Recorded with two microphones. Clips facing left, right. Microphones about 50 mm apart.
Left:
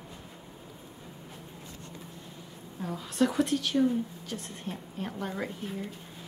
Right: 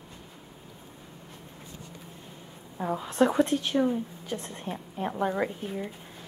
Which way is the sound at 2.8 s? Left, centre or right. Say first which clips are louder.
Right 4 dB; right.